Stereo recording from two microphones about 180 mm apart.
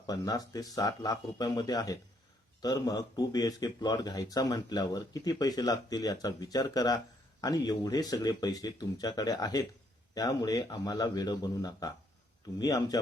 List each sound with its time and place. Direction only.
0.1 s speech: 20° left (ahead or behind)